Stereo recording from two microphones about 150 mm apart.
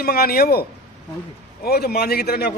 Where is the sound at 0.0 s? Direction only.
90° left.